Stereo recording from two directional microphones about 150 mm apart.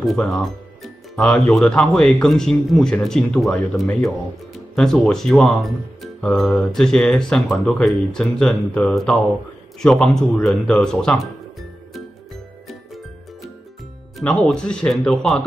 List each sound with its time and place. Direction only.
0.0 s speech: centre (ahead or behind)
14.1 s speech: 5° left (ahead or behind)